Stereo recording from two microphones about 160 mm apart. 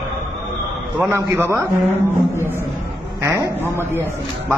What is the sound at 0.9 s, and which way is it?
Speech, 15° right (ahead or behind).